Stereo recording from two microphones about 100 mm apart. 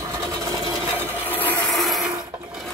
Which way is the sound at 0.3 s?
40° right (ahead or behind).